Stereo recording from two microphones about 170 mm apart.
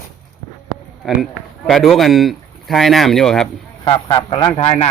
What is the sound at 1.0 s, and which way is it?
Speech, centre (ahead or behind).